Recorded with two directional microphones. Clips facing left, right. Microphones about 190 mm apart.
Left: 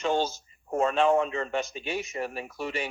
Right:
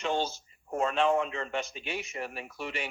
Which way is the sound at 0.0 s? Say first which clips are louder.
Left 4 dB; 40° left (ahead or behind).